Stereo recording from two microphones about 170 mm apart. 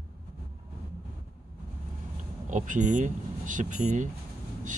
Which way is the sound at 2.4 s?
50° right (ahead or behind).